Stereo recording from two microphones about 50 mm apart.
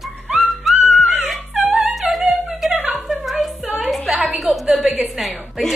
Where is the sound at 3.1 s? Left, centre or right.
Centre.